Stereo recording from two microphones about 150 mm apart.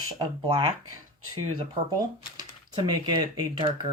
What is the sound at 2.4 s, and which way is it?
Speech, 30° right (ahead or behind).